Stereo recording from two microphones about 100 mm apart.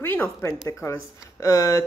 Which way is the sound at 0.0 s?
20° left (ahead or behind).